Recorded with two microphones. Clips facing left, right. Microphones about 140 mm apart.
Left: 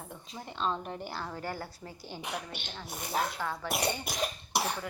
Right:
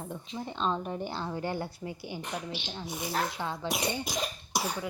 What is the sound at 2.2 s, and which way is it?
Speech, 10° left (ahead or behind).